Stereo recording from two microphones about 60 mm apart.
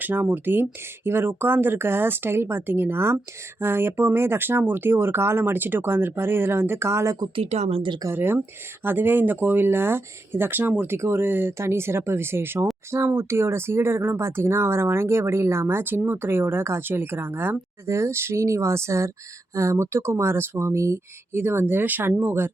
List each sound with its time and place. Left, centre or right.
0.0 s speech: right
8.1 s speech: right
10.9 s speech: right
11.5 s speech: right
17.8 s speech: right
21.3 s speech: right